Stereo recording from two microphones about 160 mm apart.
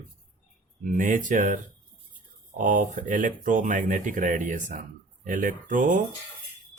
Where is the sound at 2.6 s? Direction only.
50° right (ahead or behind).